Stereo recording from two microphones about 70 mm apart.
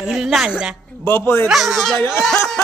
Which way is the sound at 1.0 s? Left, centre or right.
Left.